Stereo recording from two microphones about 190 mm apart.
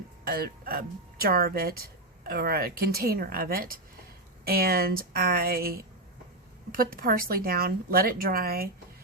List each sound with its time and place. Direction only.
0.3 s speech: 50° right (ahead or behind)